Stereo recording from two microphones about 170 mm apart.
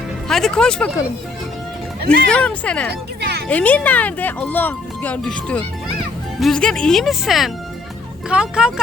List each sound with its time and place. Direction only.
0.3 s speech: 5° left (ahead or behind)
2.0 s speech: 5° left (ahead or behind)
3.2 s a sound: 75° right (ahead or behind)
3.5 s speech: 10° left (ahead or behind)